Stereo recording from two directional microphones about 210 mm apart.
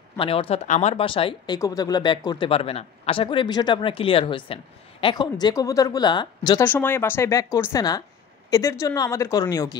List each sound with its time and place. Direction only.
0.2 s speech: 25° left (ahead or behind)
6.6 s speech: 10° left (ahead or behind)